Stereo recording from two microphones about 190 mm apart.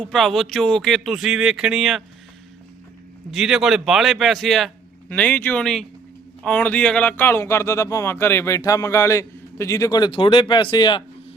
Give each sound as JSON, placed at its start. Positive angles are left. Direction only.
{"t": 0.0, "sound": "a man's voice", "side_deg": 0}
{"t": 3.3, "sound": "a man's voice", "side_deg": 0}